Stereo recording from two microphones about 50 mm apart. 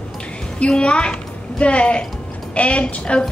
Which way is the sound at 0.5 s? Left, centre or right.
Centre.